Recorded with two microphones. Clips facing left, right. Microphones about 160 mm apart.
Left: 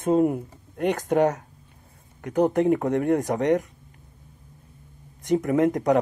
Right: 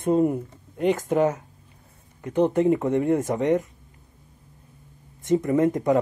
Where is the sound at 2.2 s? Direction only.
70° left (ahead or behind).